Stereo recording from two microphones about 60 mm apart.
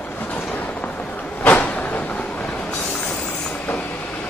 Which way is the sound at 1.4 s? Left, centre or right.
Left.